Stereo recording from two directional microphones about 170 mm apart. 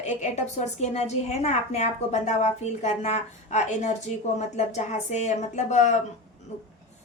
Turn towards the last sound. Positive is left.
turn(degrees=45)  # may be behind; listen again after turning